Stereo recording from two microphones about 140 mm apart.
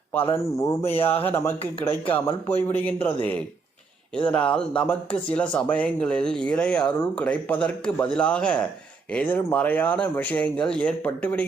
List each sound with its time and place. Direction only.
0.1 s speech: 15° left (ahead or behind)